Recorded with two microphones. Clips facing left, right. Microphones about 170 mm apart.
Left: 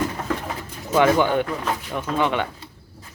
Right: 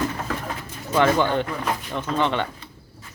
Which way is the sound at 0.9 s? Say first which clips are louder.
Left 2 dB; 10° left (ahead or behind).